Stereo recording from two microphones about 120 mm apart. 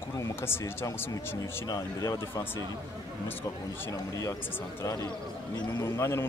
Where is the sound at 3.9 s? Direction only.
25° left (ahead or behind).